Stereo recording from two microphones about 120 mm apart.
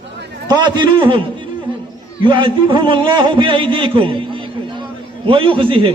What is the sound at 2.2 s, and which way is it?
A man's voice, 45° right (ahead or behind).